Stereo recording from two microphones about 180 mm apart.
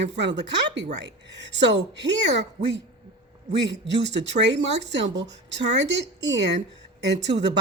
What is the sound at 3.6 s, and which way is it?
Speech, 75° right (ahead or behind).